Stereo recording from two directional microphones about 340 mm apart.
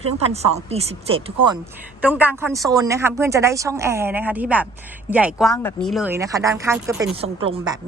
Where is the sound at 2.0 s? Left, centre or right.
Centre.